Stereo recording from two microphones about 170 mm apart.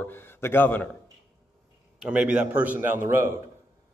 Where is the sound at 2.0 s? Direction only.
10° right (ahead or behind).